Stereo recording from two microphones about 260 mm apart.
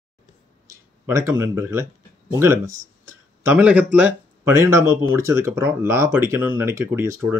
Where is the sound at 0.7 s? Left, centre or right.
Centre.